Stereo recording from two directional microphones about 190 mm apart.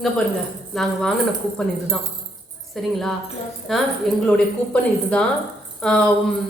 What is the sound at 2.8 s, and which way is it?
A man's voice, centre (ahead or behind).